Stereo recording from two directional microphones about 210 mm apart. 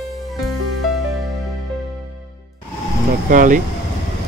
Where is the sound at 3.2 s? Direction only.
40° right (ahead or behind).